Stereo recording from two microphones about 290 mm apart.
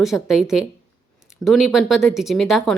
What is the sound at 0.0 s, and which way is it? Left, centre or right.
Speech, centre.